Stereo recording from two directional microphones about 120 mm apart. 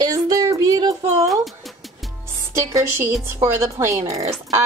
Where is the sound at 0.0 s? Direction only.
30° right (ahead or behind).